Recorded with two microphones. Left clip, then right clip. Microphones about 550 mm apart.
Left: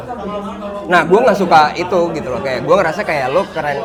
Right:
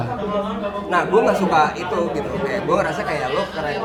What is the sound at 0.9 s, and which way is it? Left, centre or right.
A man's voice, left.